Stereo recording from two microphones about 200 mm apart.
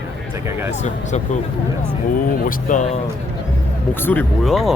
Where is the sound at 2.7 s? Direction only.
35° left (ahead or behind).